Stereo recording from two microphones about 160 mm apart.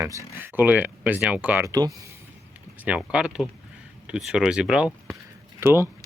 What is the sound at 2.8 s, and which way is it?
Speech, 5° right (ahead or behind).